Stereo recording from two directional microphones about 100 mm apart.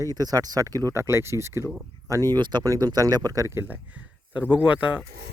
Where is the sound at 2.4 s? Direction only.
40° right (ahead or behind).